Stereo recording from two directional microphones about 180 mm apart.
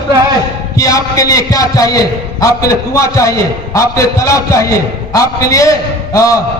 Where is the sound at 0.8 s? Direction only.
20° left (ahead or behind).